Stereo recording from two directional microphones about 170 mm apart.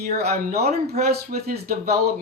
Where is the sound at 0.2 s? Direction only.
65° right (ahead or behind).